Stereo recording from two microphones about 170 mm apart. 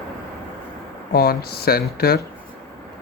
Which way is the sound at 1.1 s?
65° left (ahead or behind).